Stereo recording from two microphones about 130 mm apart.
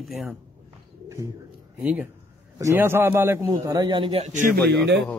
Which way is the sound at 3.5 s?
35° right (ahead or behind).